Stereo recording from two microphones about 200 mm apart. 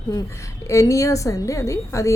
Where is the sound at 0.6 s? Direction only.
15° left (ahead or behind).